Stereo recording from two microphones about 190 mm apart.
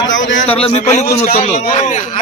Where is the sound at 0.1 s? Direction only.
80° left.